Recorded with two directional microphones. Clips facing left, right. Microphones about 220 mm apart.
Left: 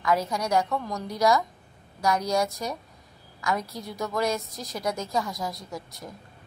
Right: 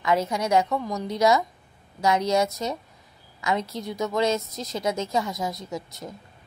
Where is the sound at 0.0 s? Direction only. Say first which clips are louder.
Right 2 dB; 25° right (ahead or behind).